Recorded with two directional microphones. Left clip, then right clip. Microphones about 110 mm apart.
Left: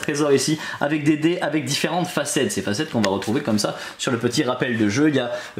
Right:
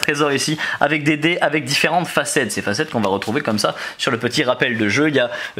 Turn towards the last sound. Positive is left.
turn(degrees=-25)  # may be behind; listen again after turning